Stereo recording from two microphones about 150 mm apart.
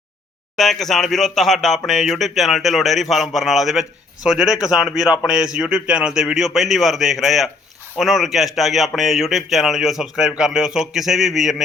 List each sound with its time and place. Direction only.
0.5 s speech: centre (ahead or behind)